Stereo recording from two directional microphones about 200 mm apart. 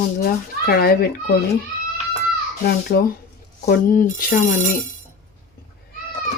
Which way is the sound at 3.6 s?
45° left (ahead or behind).